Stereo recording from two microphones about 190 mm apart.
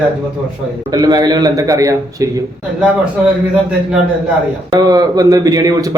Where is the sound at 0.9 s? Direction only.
20° right (ahead or behind).